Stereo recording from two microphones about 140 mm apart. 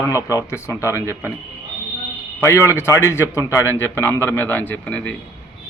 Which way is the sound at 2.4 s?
20° left (ahead or behind).